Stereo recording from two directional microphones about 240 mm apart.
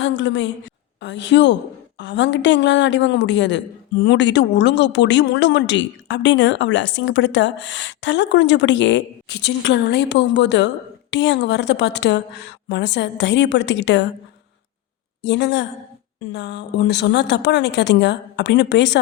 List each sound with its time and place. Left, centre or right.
0.0 s a woman's voice: left
15.2 s a woman's voice: left